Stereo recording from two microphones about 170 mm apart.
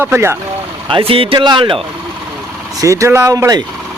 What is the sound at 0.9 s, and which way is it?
Speech, 30° right (ahead or behind).